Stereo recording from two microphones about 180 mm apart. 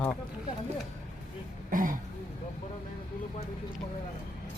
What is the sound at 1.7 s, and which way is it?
Speech, 50° right (ahead or behind).